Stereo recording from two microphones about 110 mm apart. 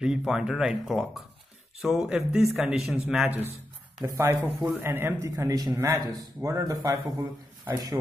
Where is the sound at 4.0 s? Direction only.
30° right (ahead or behind).